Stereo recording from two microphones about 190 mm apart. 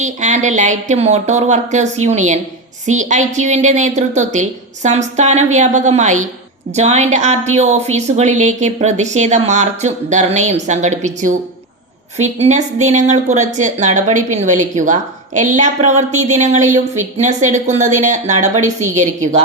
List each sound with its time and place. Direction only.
0.0 s a woman's voice: 40° right (ahead or behind)